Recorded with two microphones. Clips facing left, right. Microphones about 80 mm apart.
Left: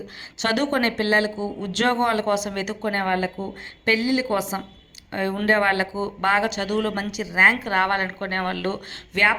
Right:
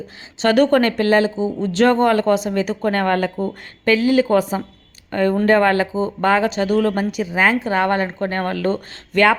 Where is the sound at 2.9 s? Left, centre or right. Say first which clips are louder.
Right 3 dB; right.